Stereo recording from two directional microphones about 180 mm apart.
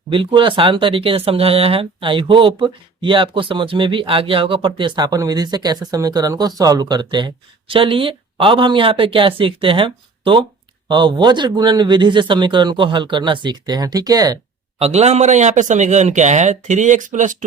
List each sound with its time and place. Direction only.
0.1 s speech: 30° right (ahead or behind)
14.8 s a man's voice: 35° right (ahead or behind)